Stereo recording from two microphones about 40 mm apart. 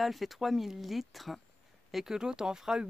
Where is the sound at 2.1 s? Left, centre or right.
Centre.